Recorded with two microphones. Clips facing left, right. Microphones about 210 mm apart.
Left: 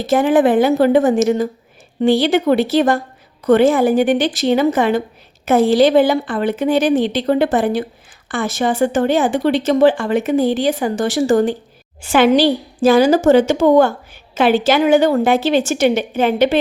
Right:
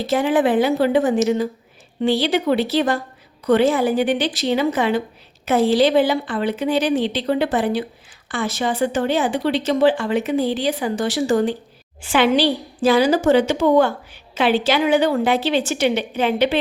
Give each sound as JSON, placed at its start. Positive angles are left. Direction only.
{"t": 0.0, "sound": "a woman's voice", "side_deg": 50}